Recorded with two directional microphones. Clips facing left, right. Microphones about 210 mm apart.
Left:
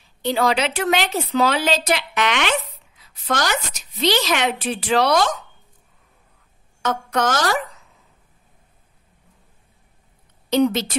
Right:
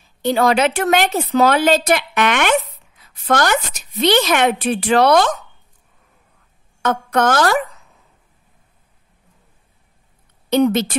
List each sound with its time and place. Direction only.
0.2 s speech: 50° right (ahead or behind)
6.8 s a woman's voice: 55° right (ahead or behind)
10.5 s a woman's voice: 55° right (ahead or behind)